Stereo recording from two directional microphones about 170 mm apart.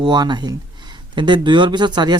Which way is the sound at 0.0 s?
25° right (ahead or behind).